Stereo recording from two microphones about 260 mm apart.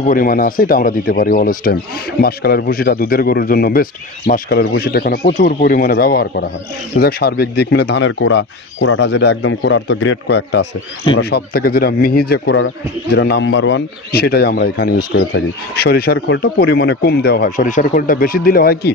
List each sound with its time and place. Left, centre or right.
0.0 s speech: left